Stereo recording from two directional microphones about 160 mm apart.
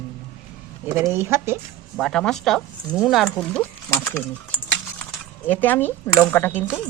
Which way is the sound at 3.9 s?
15° left (ahead or behind).